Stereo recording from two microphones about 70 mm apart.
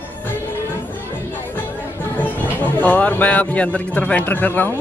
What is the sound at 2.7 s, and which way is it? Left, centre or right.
Speech, left.